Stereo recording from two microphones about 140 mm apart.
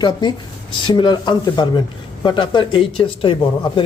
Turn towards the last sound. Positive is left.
turn(degrees=35)  # may be behind; listen again after turning